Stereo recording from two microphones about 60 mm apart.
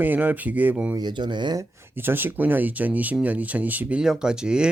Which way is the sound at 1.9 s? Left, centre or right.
Right.